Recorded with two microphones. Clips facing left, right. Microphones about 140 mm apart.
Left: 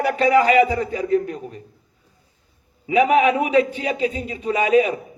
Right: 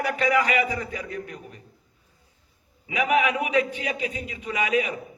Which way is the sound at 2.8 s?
30° left (ahead or behind).